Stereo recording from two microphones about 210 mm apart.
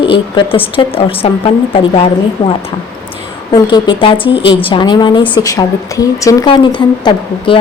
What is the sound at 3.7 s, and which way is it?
A woman's voice, 25° left (ahead or behind).